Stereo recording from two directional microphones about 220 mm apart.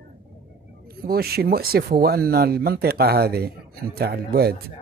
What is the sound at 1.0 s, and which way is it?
Speech, 45° right (ahead or behind).